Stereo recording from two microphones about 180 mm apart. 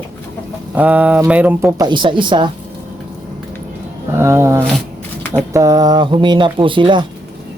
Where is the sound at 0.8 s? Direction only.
10° right (ahead or behind).